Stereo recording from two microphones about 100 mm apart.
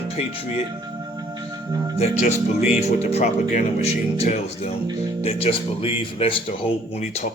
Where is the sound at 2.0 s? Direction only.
90° left.